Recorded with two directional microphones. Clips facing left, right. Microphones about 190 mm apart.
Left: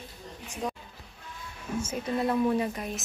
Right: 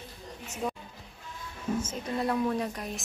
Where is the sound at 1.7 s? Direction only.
10° left (ahead or behind).